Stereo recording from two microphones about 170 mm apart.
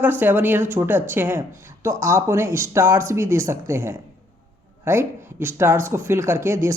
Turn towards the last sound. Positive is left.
turn(degrees=-15)  # may be behind; listen again after turning